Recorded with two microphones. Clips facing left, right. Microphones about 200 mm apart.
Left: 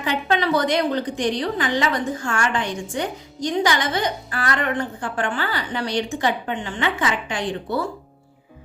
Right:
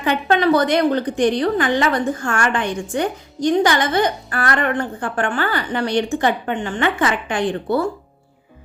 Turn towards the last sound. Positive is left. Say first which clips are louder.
# right 5 dB
turn(degrees=-55)  # may be behind; listen again after turning